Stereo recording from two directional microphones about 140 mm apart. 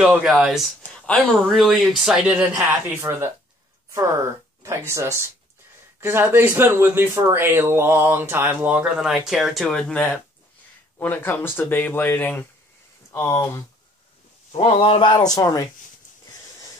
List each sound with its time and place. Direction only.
0.0 s speech: 10° right (ahead or behind)
0.8 s speech: 5° left (ahead or behind)
14.5 s speech: 45° left (ahead or behind); by 15.6 s 25° left (ahead or behind)